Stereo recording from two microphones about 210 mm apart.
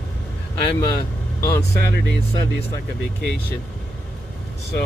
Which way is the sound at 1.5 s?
50° left (ahead or behind).